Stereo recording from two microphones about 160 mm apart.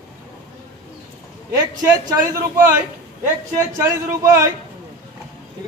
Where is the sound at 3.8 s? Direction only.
15° right (ahead or behind).